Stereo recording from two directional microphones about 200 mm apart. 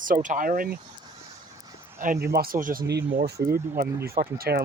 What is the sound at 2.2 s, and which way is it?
Speech, 50° right (ahead or behind).